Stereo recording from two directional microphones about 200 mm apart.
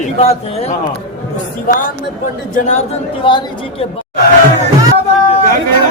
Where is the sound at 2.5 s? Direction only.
35° left (ahead or behind).